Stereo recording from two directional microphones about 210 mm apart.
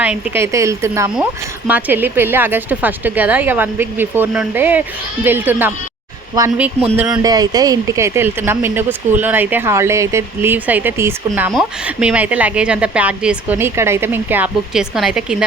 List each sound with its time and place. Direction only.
0.0 s speech: 10° right (ahead or behind)
7.3 s speech: 20° right (ahead or behind)